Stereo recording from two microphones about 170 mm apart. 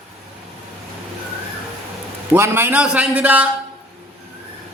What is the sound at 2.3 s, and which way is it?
A man's voice, 15° right (ahead or behind).